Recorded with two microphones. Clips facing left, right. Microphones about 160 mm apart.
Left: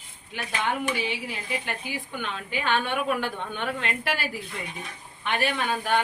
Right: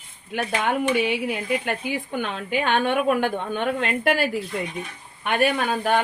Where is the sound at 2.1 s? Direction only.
45° right (ahead or behind).